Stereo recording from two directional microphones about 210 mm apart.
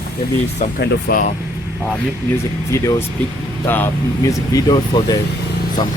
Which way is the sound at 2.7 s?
15° left (ahead or behind).